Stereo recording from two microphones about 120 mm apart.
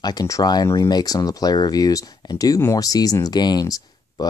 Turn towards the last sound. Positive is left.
turn(degrees=30)  # may be behind; listen again after turning